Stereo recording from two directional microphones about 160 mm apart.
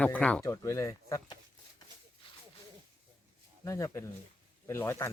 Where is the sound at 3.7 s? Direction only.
20° left (ahead or behind).